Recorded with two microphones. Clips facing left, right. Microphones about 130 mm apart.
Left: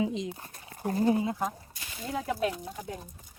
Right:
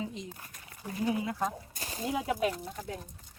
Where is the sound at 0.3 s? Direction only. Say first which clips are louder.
Left 4 dB; 30° left (ahead or behind).